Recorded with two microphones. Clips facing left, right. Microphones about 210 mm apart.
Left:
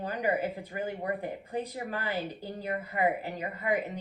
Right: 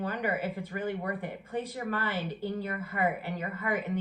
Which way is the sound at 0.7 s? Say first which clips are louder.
Right 2 dB; 25° left (ahead or behind).